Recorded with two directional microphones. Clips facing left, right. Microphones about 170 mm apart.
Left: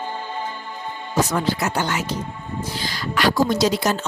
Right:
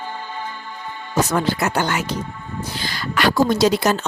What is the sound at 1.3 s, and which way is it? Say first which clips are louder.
A woman's voice: right 2 dB; 60° right (ahead or behind).